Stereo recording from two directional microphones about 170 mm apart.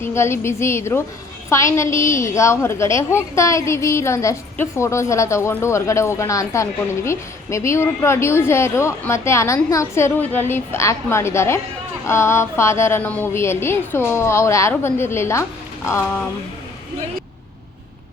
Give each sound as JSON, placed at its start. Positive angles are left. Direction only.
{"t": 0.0, "sound": "a woman's voice", "side_deg": 15}